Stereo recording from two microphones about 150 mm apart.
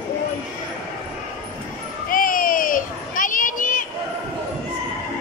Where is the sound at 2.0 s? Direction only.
65° left (ahead or behind).